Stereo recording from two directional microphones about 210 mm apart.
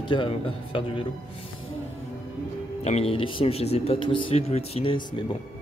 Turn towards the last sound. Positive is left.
turn(degrees=25)  # may be behind; listen again after turning